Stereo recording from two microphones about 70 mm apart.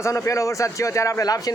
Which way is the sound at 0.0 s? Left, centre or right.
Left.